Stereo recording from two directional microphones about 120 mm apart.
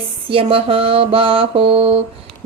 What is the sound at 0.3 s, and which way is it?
Speech, 50° right (ahead or behind).